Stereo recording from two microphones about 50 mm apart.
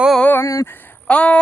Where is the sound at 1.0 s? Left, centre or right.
Left.